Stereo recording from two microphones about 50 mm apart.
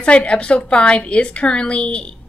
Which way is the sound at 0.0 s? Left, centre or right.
Left.